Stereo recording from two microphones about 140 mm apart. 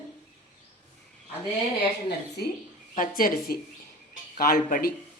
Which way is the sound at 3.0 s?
90° left.